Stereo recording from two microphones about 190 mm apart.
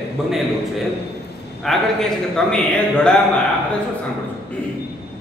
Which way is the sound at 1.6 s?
Centre (ahead or behind).